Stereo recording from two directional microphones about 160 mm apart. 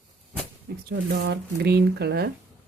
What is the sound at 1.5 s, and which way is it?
Speech, 90° right.